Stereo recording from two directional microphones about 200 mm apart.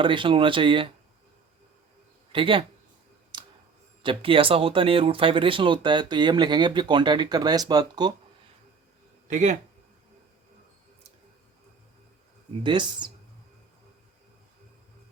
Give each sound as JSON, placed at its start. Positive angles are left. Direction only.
{"t": 0.0, "sound": "speech", "side_deg": -25}
{"t": 2.3, "sound": "speech", "side_deg": -25}
{"t": 3.3, "sound": "tick", "side_deg": -20}
{"t": 4.0, "sound": "speech", "side_deg": -25}
{"t": 9.2, "sound": "speech", "side_deg": -35}
{"t": 12.6, "sound": "speech", "side_deg": -25}